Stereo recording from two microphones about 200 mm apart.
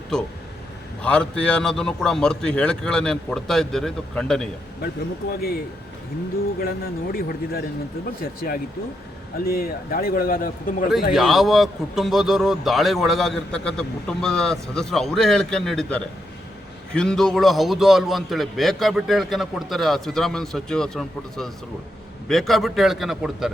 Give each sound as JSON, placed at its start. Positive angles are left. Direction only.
{"t": 0.1, "sound": "a man's voice", "side_deg": 5}
{"t": 5.3, "sound": "a man's voice", "side_deg": 50}
{"t": 6.6, "sound": "a man's voice", "side_deg": 50}
{"t": 11.1, "sound": "a man's voice", "side_deg": 0}